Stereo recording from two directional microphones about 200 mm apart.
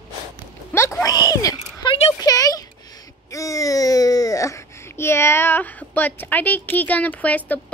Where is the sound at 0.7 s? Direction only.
15° left (ahead or behind).